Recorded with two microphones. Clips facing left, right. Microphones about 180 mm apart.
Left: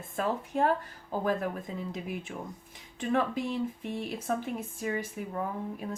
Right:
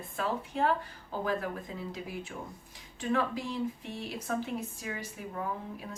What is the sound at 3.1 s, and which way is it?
Speech, 55° left (ahead or behind).